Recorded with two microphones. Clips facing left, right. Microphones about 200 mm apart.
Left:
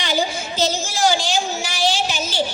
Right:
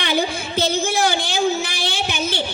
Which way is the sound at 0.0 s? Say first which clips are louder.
Right 1 dB; 60° right (ahead or behind).